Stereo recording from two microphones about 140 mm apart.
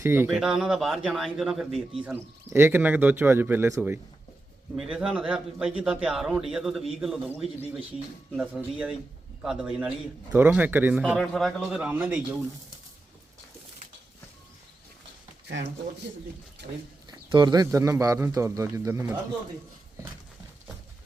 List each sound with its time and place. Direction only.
0.0 s speech: 15° right (ahead or behind)
0.3 s a man's voice: 5° right (ahead or behind)
2.0 s a man's voice: 15° right (ahead or behind)
17.1 s speech: 30° right (ahead or behind)